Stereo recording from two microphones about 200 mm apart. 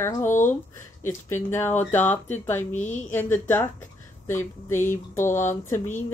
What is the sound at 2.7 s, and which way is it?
Speech, 35° left (ahead or behind).